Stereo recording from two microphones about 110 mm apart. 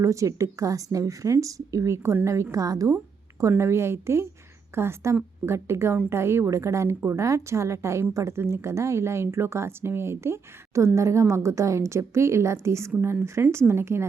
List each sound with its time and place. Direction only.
0.0 s a woman's voice: 30° right (ahead or behind)